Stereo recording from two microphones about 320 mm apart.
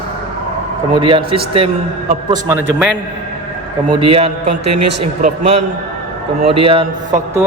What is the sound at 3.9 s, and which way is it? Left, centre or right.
Speech, centre.